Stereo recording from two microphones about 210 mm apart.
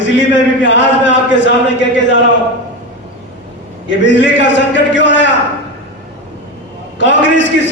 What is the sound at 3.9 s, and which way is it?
A man's voice, 60° left (ahead or behind).